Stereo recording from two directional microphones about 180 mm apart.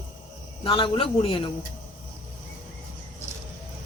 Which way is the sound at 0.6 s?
30° left (ahead or behind).